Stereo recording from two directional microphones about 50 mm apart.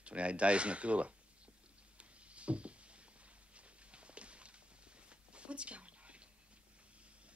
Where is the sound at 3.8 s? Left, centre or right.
Right.